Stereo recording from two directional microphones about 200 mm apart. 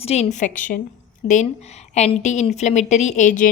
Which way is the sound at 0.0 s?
30° left (ahead or behind).